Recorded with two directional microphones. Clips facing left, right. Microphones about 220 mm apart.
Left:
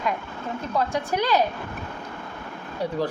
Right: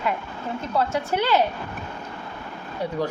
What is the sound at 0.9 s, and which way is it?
Speech, 15° left (ahead or behind).